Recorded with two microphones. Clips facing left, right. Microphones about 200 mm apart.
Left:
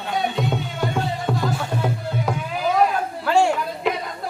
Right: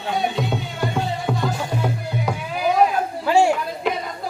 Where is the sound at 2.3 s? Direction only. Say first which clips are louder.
Left 1 dB; centre (ahead or behind).